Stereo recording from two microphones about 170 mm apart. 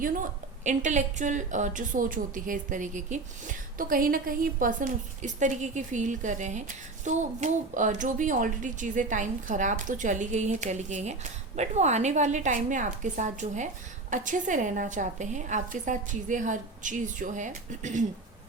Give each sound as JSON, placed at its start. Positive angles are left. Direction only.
{"t": 0.0, "sound": "a woman's voice", "side_deg": -50}